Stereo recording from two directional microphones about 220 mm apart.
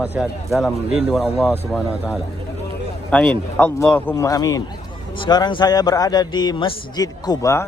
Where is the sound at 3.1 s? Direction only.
5° left (ahead or behind).